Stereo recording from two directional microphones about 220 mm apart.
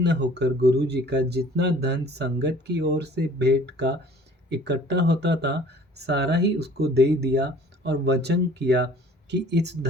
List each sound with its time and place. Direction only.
0.0 s speech: 50° right (ahead or behind)